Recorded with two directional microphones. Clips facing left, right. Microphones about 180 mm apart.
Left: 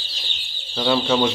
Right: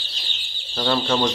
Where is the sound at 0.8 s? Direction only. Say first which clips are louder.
Left 2 dB; 5° left (ahead or behind).